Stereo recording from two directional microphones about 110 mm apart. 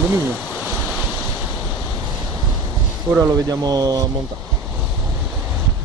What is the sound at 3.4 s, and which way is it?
Speech, 35° right (ahead or behind).